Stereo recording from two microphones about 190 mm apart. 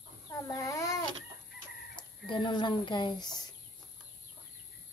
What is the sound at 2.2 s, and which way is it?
Speech, 25° left (ahead or behind).